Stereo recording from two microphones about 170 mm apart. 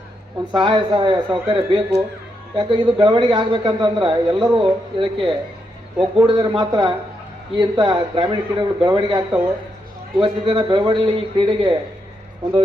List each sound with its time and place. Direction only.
0.6 s a man's voice: 30° right (ahead or behind)